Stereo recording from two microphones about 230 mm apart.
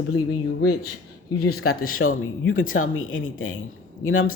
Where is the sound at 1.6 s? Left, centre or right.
Left.